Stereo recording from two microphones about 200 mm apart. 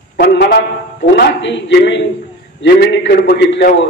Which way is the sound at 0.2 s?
55° left (ahead or behind).